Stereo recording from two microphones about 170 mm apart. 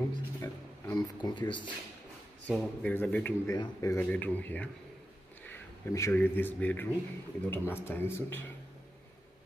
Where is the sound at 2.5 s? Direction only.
5° left (ahead or behind).